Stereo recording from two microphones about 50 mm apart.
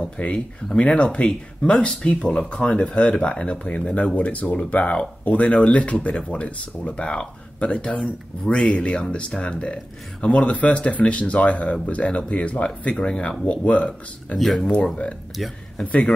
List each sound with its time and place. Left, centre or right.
0.0 s speech: left
14.4 s speech: centre
15.8 s speech: left